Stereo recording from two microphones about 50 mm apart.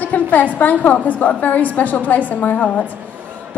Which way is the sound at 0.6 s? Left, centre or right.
Left.